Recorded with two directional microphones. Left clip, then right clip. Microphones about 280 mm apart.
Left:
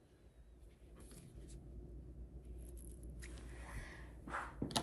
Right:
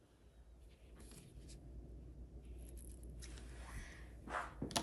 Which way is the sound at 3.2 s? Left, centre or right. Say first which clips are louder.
Left 2 dB; centre.